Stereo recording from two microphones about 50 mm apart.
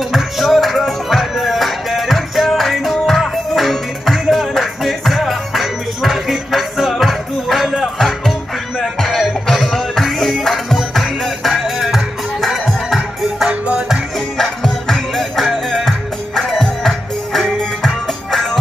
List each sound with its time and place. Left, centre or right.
0.1 s music: centre
13.5 s music: right
14.4 s music: centre